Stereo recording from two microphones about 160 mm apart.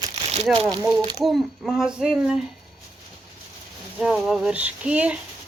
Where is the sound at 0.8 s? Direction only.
20° right (ahead or behind).